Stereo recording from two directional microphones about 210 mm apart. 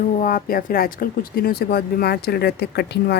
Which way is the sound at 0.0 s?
40° left (ahead or behind).